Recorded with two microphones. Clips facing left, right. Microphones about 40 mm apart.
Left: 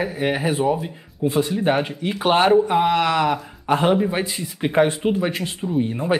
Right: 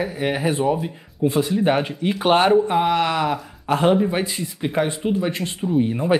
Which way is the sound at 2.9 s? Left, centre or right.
Left.